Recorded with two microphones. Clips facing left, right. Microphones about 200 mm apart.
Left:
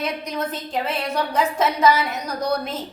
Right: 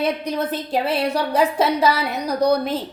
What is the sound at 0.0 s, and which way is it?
A woman's voice, 30° right (ahead or behind).